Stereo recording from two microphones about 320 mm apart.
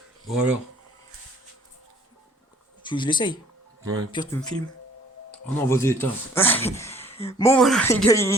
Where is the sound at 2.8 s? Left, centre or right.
Centre.